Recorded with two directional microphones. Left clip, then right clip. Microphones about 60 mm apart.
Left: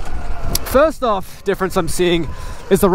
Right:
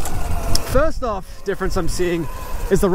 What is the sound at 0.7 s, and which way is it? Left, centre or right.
Speech, left.